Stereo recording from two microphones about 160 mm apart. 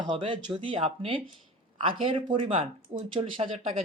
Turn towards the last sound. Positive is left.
turn(degrees=-35)  # may be behind; listen again after turning